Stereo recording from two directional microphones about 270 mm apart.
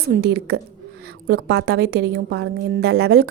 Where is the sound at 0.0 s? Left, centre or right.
Right.